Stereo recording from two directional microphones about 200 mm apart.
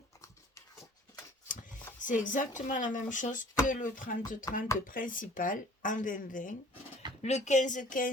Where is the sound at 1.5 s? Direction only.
40° left (ahead or behind).